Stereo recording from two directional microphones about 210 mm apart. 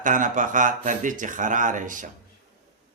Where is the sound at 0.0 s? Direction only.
40° right (ahead or behind).